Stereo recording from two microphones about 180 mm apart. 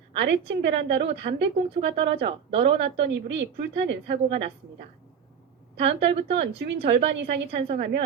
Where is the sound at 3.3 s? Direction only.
80° right.